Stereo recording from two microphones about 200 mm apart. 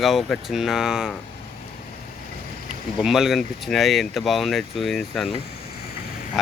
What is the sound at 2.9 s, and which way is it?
Speech, centre (ahead or behind).